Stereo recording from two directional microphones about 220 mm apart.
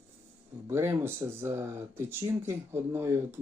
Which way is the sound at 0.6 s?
10° right (ahead or behind).